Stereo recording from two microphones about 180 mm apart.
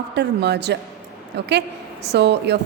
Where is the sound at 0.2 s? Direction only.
70° right (ahead or behind).